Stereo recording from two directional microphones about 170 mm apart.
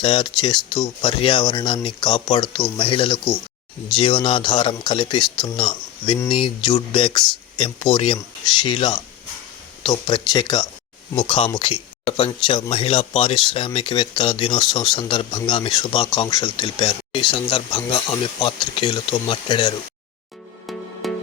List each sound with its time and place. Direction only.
0.0 s speech: 25° left (ahead or behind)
21.0 s music: centre (ahead or behind)